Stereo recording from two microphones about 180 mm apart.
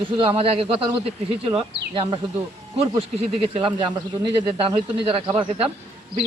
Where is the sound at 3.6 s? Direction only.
30° right (ahead or behind).